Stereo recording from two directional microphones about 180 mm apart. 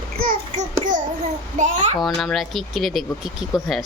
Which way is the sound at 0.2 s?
50° right (ahead or behind).